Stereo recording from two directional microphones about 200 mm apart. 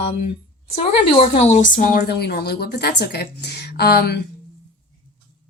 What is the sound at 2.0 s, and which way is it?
Speech, 55° left (ahead or behind).